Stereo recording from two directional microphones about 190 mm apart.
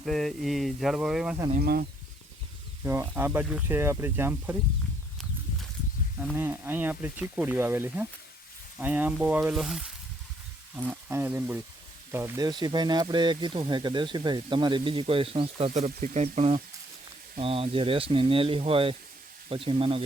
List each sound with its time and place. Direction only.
0.0 s speech: centre (ahead or behind)
1.5 s speech: 50° right (ahead or behind)
2.8 s speech: 10° right (ahead or behind)
6.3 s speech: 10° right (ahead or behind); by 20.1 s 30° right (ahead or behind)